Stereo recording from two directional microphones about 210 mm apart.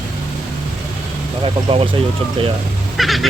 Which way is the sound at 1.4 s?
25° right (ahead or behind).